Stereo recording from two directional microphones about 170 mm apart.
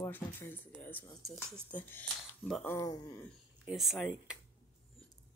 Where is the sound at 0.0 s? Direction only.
15° left (ahead or behind).